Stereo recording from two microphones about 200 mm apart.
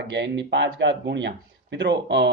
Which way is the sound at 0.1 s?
60° right (ahead or behind).